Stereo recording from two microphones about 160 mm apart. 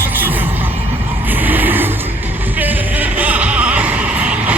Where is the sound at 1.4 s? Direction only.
10° right (ahead or behind).